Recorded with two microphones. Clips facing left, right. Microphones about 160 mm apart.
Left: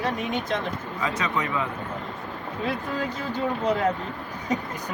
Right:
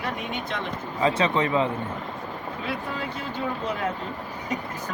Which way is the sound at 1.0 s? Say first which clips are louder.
Right 6 dB; 30° right (ahead or behind).